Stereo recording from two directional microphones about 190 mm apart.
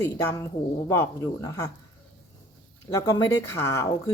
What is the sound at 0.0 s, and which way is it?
Speech, 15° left (ahead or behind).